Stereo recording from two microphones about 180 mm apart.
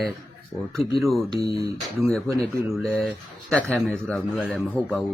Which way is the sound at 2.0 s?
Centre (ahead or behind).